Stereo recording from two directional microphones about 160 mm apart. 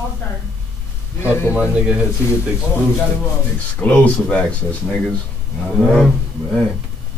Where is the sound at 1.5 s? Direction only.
10° right (ahead or behind).